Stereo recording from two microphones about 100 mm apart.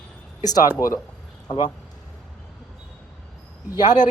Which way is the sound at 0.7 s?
35° left (ahead or behind).